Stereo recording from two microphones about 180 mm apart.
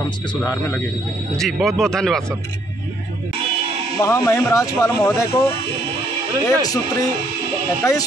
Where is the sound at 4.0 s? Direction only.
15° left (ahead or behind).